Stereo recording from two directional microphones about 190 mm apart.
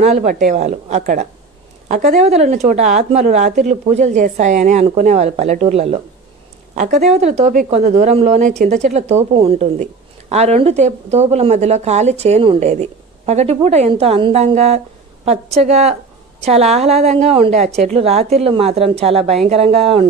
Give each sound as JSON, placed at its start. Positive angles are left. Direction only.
{"t": 0.0, "sound": "a woman's voice", "side_deg": -40}